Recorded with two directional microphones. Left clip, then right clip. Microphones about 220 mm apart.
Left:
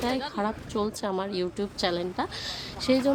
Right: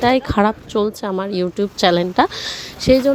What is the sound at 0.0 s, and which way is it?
A woman's voice, 35° right (ahead or behind).